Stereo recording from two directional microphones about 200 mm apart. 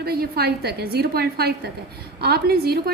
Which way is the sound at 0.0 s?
50° right (ahead or behind).